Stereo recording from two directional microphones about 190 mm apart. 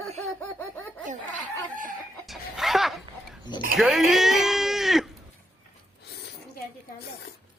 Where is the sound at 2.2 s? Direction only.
Centre (ahead or behind).